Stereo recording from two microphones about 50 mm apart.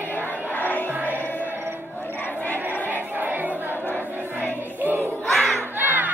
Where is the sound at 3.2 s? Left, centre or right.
Right.